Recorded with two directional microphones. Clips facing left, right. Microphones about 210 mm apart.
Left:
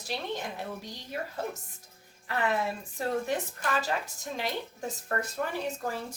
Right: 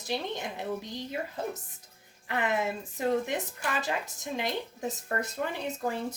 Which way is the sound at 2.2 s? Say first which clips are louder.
Even; 20° right (ahead or behind).